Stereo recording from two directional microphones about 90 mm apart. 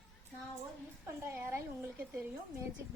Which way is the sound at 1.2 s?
25° right (ahead or behind).